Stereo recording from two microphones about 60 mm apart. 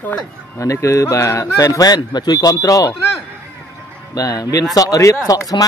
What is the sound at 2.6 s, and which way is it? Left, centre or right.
Speech, left.